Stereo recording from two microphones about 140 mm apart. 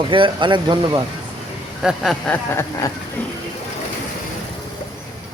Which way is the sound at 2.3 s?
20° left (ahead or behind).